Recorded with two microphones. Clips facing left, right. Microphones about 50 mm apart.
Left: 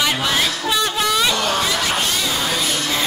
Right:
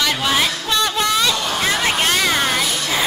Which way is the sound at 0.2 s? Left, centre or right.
Centre.